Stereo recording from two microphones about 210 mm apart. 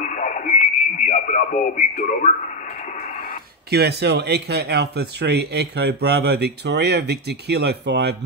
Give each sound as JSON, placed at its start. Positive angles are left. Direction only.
{"t": 0.0, "sound": "radio", "side_deg": 35}
{"t": 3.7, "sound": "speech", "side_deg": -50}